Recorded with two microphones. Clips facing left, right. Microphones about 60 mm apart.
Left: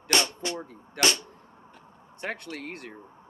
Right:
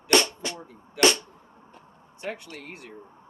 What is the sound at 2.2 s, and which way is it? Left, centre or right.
Speech, left.